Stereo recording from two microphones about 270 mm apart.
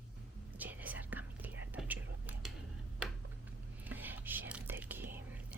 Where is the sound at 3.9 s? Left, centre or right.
Centre.